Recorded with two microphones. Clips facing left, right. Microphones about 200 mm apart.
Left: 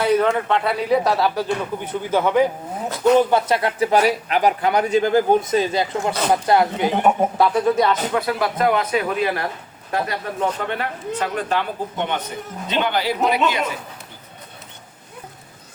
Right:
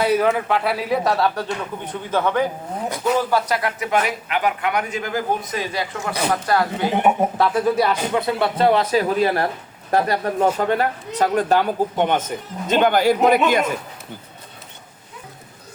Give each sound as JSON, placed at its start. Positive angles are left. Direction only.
{"t": 0.0, "sound": "a man's voice", "side_deg": -10}
{"t": 3.2, "sound": "speech", "side_deg": 25}
{"t": 6.9, "sound": "speech", "side_deg": -5}
{"t": 8.1, "sound": "a man's voice", "side_deg": -25}